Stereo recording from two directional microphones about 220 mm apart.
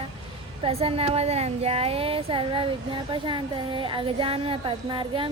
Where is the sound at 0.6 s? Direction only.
25° right (ahead or behind).